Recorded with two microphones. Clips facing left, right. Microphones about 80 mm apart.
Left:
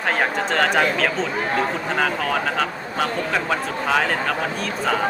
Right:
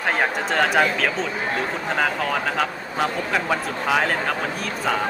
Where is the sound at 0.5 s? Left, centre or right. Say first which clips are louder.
Even; centre.